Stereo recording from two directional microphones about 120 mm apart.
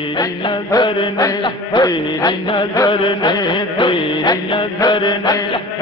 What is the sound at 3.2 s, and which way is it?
Music, 35° left (ahead or behind).